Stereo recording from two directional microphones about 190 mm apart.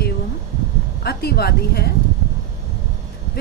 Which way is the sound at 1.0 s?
55° left (ahead or behind).